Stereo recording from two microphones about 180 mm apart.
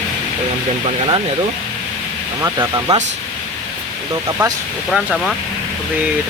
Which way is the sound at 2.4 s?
15° right (ahead or behind).